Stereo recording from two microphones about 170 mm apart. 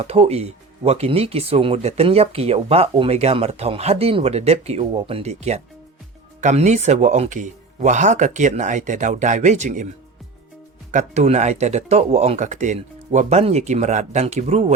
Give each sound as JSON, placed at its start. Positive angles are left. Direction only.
{"t": 0.0, "sound": "speech", "side_deg": -35}
{"t": 10.9, "sound": "speech", "side_deg": -45}